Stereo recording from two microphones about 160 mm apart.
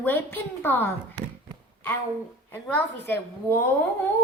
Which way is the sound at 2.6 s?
10° left (ahead or behind).